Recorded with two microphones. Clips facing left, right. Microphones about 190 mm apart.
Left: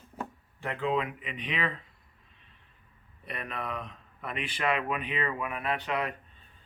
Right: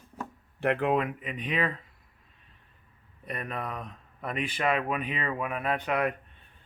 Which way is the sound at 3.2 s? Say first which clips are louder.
Right 2 dB; 45° right (ahead or behind).